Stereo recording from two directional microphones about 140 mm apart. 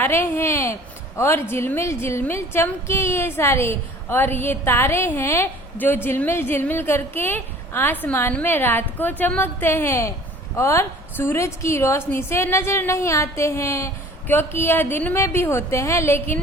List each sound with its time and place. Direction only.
0.0 s a woman's voice: 15° left (ahead or behind)